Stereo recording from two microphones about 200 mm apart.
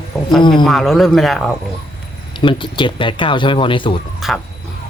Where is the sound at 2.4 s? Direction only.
25° left (ahead or behind).